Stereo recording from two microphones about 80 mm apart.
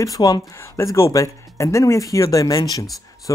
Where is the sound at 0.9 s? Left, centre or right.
Left.